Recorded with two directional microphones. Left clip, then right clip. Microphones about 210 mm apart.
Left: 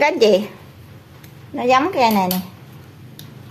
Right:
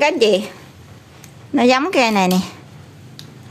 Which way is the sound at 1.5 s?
40° right (ahead or behind).